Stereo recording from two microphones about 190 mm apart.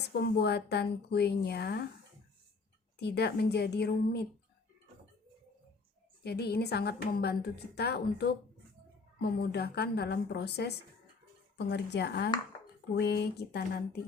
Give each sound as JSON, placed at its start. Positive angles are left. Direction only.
{"t": 0.1, "sound": "a woman's voice", "side_deg": 60}
{"t": 3.0, "sound": "a woman's voice", "side_deg": 60}
{"t": 6.2, "sound": "a woman's voice", "side_deg": 60}